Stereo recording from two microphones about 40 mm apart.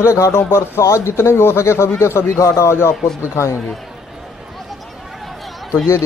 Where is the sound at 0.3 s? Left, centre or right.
Left.